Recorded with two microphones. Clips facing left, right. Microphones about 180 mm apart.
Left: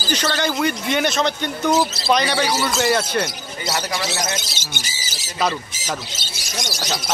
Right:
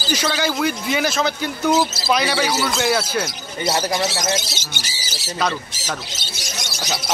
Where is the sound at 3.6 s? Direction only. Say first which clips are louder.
Right 4 dB; 30° right (ahead or behind).